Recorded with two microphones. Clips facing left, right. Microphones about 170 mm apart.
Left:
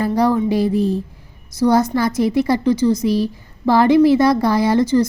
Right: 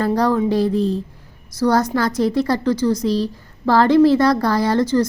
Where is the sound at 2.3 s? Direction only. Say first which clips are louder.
Left 2 dB; 20° left (ahead or behind).